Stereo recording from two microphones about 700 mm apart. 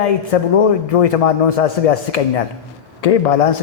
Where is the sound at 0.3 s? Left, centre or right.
Left.